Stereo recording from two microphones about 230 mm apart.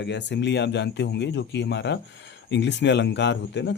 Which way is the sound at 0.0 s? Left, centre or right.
Left.